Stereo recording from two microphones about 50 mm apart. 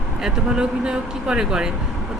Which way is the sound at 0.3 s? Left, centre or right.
Centre.